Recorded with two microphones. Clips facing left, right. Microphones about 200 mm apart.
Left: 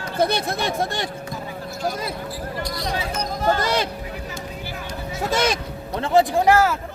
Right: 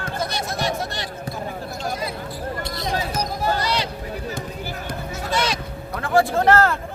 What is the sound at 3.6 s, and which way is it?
Speech, 50° left (ahead or behind).